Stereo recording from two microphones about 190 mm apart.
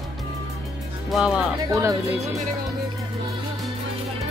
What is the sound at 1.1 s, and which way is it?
Speech, 5° right (ahead or behind).